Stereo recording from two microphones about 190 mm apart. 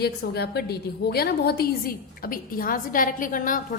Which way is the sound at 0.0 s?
55° left (ahead or behind).